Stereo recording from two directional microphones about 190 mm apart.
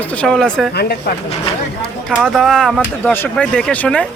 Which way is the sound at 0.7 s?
60° left (ahead or behind).